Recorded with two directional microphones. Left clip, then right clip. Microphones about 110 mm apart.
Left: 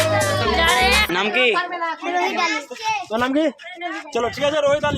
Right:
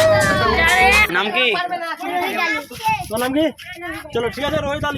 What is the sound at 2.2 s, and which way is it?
Speech, 10° left (ahead or behind).